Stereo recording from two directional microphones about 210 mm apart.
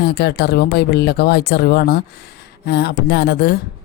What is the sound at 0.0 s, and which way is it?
Speech, 50° left (ahead or behind).